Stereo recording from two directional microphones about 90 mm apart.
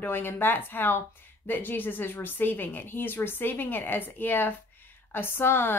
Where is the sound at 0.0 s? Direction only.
25° left (ahead or behind).